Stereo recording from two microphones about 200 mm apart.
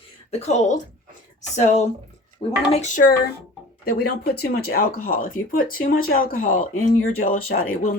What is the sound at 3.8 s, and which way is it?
Speech, 50° left (ahead or behind).